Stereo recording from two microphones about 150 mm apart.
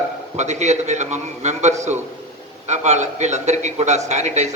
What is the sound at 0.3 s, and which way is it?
Speech, 50° right (ahead or behind).